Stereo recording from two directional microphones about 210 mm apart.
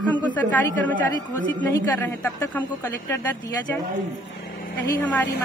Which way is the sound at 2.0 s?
10° left (ahead or behind).